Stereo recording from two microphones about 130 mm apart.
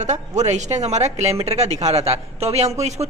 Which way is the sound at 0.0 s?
60° right (ahead or behind).